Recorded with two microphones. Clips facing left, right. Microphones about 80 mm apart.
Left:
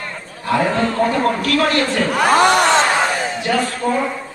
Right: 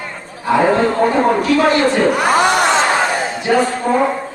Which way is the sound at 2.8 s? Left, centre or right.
Right.